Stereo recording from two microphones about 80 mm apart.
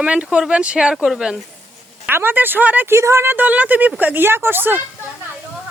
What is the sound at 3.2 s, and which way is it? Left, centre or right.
Speech, right.